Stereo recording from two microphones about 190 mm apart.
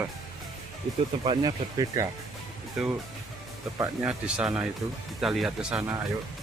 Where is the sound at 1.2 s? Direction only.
25° right (ahead or behind).